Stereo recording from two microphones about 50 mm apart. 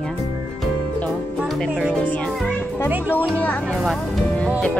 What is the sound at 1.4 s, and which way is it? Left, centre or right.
Music, centre.